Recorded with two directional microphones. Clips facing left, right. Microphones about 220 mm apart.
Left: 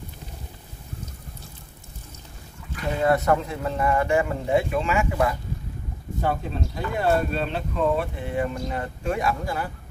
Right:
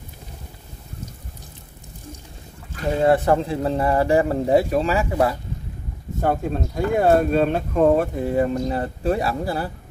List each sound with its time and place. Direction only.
3.0 s speech: 30° right (ahead or behind)
6.2 s speech: 50° right (ahead or behind)